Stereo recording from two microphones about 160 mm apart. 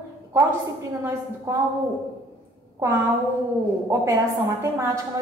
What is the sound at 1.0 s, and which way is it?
Speech, 20° right (ahead or behind).